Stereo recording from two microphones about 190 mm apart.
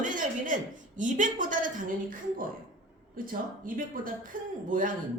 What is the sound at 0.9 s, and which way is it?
A woman's voice, 40° right (ahead or behind).